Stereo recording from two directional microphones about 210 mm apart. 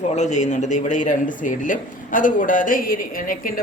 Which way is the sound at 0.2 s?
35° left (ahead or behind).